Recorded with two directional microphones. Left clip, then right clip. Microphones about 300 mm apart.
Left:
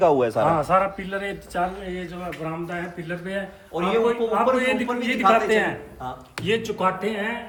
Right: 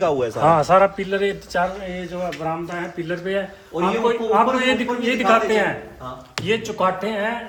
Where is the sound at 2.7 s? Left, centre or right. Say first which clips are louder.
Right 4 dB; centre.